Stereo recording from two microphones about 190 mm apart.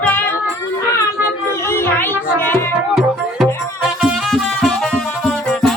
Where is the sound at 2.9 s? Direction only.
Centre (ahead or behind).